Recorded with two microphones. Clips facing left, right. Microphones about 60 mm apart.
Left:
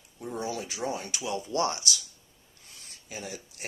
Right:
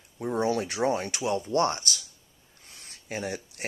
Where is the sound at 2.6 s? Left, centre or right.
Right.